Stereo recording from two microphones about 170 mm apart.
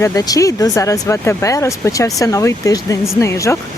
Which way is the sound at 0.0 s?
20° left (ahead or behind).